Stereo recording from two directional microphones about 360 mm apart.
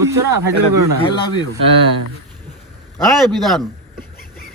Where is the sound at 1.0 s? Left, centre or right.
Centre.